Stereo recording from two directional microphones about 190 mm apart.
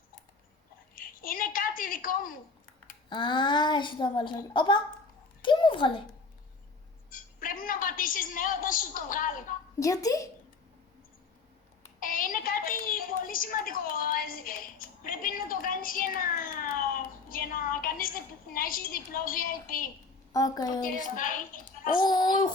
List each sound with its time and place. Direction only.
0.9 s a sound: 50° left (ahead or behind)
3.1 s a child's voice: 25° left (ahead or behind)
7.1 s a woman's voice: 45° left (ahead or behind)
9.8 s speech: 15° left (ahead or behind)
11.9 s a sound: 45° left (ahead or behind)
18.5 s a woman's voice: 50° left (ahead or behind)
20.3 s a child's voice: 20° left (ahead or behind)
21.2 s a woman's voice: 45° left (ahead or behind)
21.9 s a child's voice: 20° left (ahead or behind)